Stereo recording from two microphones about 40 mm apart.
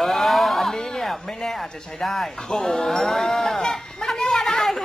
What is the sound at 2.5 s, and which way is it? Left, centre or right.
Sheep, centre.